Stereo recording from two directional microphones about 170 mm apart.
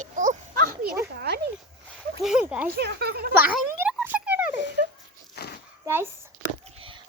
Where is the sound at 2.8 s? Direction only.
70° right (ahead or behind).